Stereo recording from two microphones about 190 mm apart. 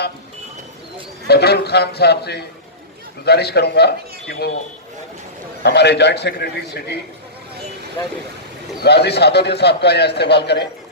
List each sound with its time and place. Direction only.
1.3 s a man's voice: 60° left (ahead or behind)
5.6 s a man's voice: 60° left (ahead or behind)
8.8 s a man's voice: 60° left (ahead or behind)